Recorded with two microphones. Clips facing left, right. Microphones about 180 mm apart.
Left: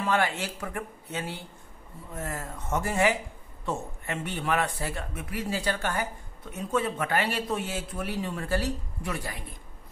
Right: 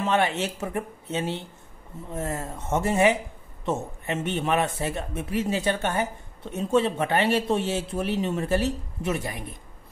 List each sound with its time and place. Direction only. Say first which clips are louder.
0.0 s speech: right 3 dB; 20° right (ahead or behind)